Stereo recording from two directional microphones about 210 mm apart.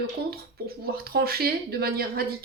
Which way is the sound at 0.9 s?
45° right (ahead or behind).